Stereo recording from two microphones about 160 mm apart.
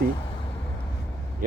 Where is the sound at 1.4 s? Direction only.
55° right (ahead or behind).